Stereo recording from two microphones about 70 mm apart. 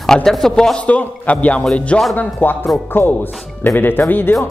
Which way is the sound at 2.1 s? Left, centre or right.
Left.